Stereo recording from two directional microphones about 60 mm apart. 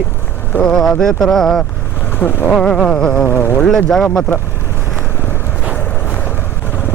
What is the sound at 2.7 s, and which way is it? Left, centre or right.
Speech, centre.